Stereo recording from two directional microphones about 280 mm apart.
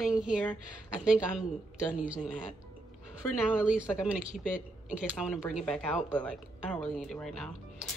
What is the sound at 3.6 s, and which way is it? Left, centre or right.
Speech, centre.